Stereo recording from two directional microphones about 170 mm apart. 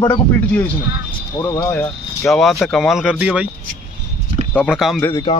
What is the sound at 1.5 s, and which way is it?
Speech, 15° left (ahead or behind).